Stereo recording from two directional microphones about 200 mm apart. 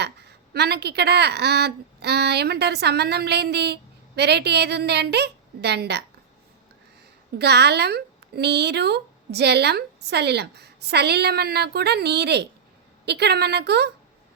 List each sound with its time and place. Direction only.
0.0 s a woman's voice: 55° right (ahead or behind)
7.3 s a woman's voice: 55° right (ahead or behind)